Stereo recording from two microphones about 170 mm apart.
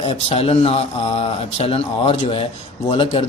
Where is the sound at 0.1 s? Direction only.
35° left (ahead or behind).